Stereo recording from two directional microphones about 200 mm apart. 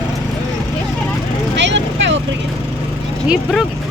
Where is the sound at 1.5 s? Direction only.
60° right (ahead or behind).